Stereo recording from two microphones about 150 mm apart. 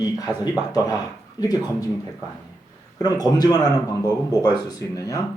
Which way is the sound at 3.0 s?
25° left (ahead or behind).